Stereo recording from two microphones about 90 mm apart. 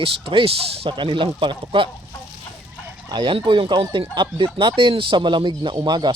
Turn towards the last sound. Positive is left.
turn(degrees=-55)  # may be behind; listen again after turning